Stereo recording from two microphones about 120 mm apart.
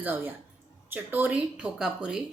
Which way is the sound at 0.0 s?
15° right (ahead or behind).